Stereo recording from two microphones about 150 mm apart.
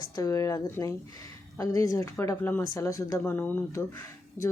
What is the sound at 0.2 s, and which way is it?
Speech, 20° left (ahead or behind).